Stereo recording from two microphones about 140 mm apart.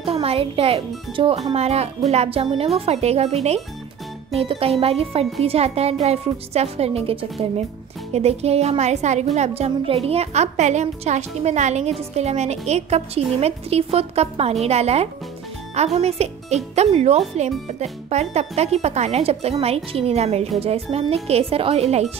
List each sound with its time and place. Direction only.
0.0 s speech: 45° right (ahead or behind)